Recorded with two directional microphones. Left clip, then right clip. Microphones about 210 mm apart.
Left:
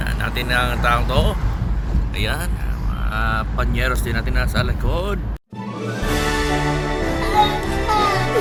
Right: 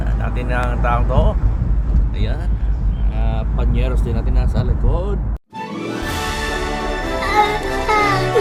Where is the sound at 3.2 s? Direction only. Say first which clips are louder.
Left 6 dB; 35° left (ahead or behind).